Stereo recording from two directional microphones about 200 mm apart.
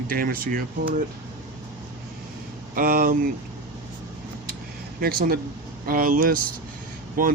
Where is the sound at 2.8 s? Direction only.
45° right (ahead or behind).